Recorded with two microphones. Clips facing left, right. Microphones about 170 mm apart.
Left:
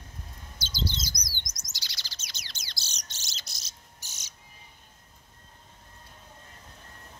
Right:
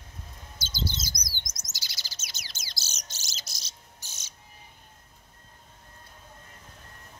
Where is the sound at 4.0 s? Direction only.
15° left (ahead or behind).